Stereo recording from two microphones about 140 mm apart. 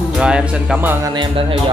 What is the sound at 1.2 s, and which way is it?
Music, 40° right (ahead or behind).